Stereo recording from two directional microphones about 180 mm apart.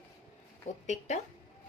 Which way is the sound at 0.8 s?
40° left (ahead or behind).